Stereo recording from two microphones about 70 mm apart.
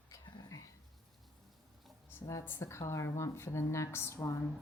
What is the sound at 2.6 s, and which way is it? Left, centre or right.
A woman's voice, left.